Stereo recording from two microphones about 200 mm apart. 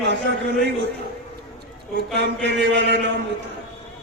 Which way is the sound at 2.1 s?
60° right (ahead or behind).